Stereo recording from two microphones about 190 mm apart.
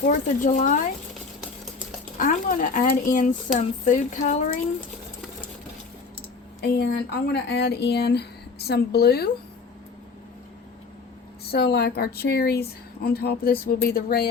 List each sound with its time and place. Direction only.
0.0 s speech: 40° left (ahead or behind)
2.1 s speech: 45° left (ahead or behind)
6.7 s speech: 60° left (ahead or behind)
11.5 s speech: 55° left (ahead or behind)